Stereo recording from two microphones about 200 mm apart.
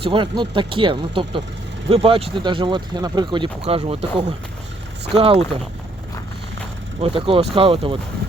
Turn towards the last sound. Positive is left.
turn(degrees=-25)  # may be behind; listen again after turning